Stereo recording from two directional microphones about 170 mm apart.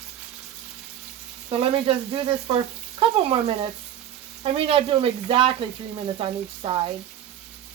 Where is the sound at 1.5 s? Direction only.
30° right (ahead or behind).